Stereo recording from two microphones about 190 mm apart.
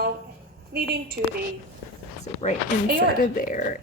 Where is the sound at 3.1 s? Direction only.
45° left (ahead or behind).